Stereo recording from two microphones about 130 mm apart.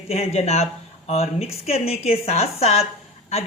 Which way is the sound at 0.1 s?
55° left (ahead or behind).